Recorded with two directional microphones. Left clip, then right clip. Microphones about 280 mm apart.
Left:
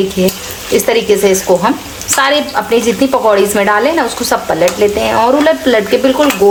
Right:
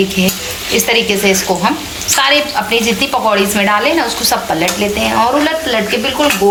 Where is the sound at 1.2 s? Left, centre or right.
Left.